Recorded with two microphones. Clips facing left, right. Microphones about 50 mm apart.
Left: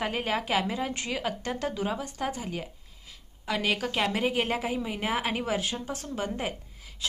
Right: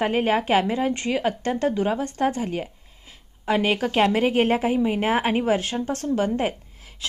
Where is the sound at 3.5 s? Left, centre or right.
Right.